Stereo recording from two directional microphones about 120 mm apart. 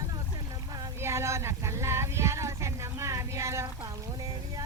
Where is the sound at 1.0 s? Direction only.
20° right (ahead or behind).